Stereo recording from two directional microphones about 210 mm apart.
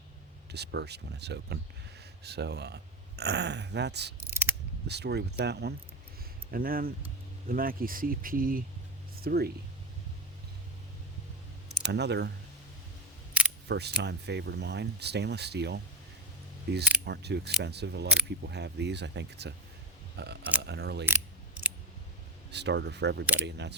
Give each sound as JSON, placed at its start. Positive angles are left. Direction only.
{"t": 0.5, "sound": "speech", "side_deg": -55}
{"t": 4.3, "sound": "mechanisms", "side_deg": -10}
{"t": 4.9, "sound": "speech", "side_deg": -50}
{"t": 11.9, "sound": "speech", "side_deg": -55}
{"t": 13.7, "sound": "speech", "side_deg": -55}
{"t": 22.5, "sound": "speech", "side_deg": -55}